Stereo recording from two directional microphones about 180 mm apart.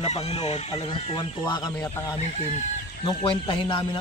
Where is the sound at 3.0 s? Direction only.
25° left (ahead or behind).